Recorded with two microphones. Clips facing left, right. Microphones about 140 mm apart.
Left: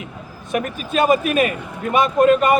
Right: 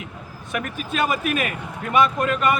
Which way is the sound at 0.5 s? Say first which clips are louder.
Left 5 dB; 25° left (ahead or behind).